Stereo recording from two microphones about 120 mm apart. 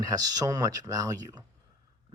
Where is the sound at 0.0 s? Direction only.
35° right (ahead or behind).